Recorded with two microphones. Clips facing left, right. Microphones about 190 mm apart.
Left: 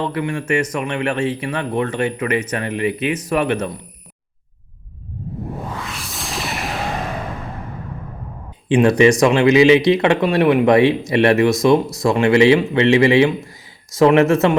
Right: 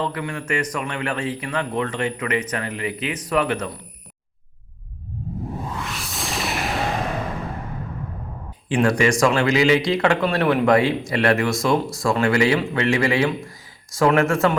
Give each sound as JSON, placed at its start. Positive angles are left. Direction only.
{"t": 0.0, "sound": "speech", "side_deg": 25}
{"t": 5.9, "sound": "music", "side_deg": 0}
{"t": 8.7, "sound": "speech", "side_deg": 20}